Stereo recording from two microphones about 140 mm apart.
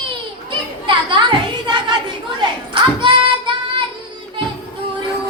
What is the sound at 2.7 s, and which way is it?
Singing, 35° right (ahead or behind).